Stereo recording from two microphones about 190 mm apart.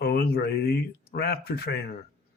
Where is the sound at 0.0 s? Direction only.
55° left (ahead or behind).